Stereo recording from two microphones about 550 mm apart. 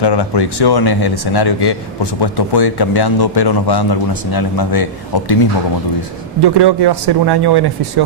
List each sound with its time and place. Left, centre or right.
0.0 s a man's voice: left
6.4 s speech: right